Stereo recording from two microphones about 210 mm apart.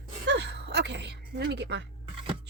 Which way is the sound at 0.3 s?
55° right (ahead or behind).